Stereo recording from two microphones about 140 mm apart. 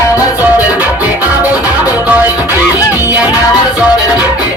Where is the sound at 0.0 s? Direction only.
20° left (ahead or behind).